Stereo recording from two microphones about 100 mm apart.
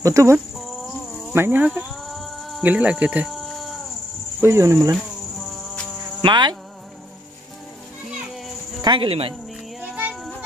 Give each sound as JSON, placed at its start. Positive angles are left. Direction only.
{"t": 0.0, "sound": "speech", "side_deg": -30}
{"t": 0.6, "sound": "a sound", "side_deg": 0}
{"t": 1.3, "sound": "speech", "side_deg": -20}
{"t": 1.9, "sound": "a sound", "side_deg": 0}
{"t": 2.6, "sound": "cricket", "side_deg": -15}
{"t": 3.3, "sound": "insect", "side_deg": 0}
{"t": 4.4, "sound": "speech", "side_deg": -25}
{"t": 4.9, "sound": "cricket", "side_deg": 0}
{"t": 6.2, "sound": "insect", "side_deg": -45}
{"t": 8.8, "sound": "speech", "side_deg": -55}
{"t": 9.8, "sound": "music", "side_deg": -15}